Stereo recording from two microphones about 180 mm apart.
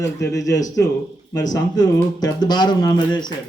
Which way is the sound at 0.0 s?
20° left (ahead or behind).